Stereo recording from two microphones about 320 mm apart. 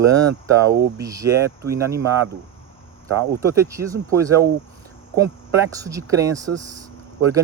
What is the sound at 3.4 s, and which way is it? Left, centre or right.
Speech, centre.